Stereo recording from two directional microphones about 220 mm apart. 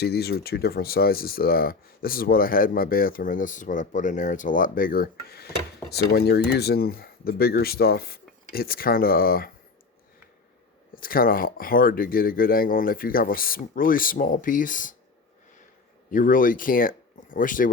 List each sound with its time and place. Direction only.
0.0 s speech: 45° left (ahead or behind)
10.9 s speech: 40° left (ahead or behind)
16.1 s speech: 40° left (ahead or behind)